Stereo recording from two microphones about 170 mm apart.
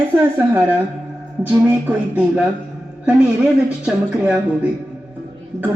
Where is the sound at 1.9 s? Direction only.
10° right (ahead or behind).